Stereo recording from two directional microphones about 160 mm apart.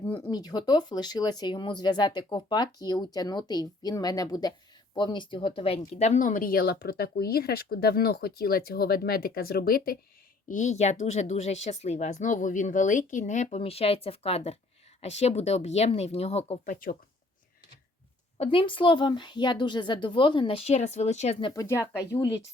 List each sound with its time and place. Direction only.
0.2 s a woman's voice: 25° left (ahead or behind)
5.9 s speech: 45° left (ahead or behind); by 10.0 s 70° left (ahead or behind)
10.5 s a woman's voice: 50° left (ahead or behind)
16.6 s speech: 60° left (ahead or behind)
18.3 s a woman's voice: 30° left (ahead or behind)
21.4 s speech: 20° left (ahead or behind)